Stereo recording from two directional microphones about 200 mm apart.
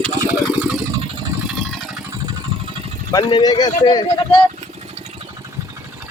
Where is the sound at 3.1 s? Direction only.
20° left (ahead or behind).